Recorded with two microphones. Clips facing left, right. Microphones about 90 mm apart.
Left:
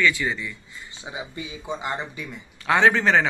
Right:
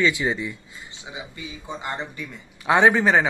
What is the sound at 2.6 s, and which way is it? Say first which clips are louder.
Speech: right 2 dB; 20° right (ahead or behind).